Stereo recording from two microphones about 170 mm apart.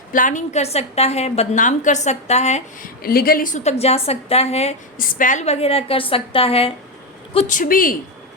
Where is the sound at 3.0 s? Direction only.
60° left (ahead or behind); by 4.7 s 40° left (ahead or behind).